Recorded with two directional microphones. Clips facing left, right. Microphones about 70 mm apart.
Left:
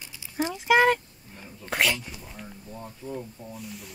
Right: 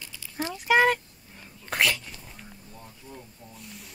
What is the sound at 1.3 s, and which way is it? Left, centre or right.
Dog, centre.